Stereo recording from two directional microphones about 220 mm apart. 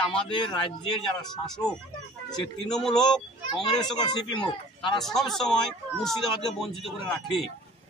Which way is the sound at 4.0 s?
20° left (ahead or behind).